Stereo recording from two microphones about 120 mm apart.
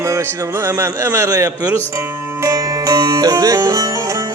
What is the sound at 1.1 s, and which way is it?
Speech, 25° right (ahead or behind).